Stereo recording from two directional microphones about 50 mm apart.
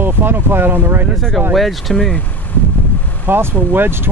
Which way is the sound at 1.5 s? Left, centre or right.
Centre.